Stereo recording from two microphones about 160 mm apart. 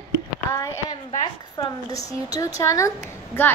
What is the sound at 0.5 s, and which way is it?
A woman's voice, 20° left (ahead or behind).